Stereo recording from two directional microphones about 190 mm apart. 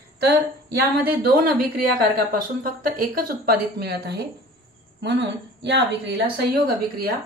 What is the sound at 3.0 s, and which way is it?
Speech, 50° right (ahead or behind).